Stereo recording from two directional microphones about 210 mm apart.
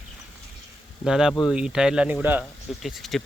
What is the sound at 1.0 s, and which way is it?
Speech, 5° right (ahead or behind).